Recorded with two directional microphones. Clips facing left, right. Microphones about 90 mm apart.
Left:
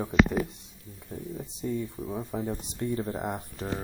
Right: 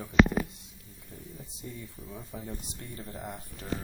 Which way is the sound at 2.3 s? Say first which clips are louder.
Left 9 dB; 50° left (ahead or behind).